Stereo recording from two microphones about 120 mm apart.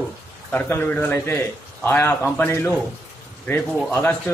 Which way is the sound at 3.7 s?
Centre (ahead or behind).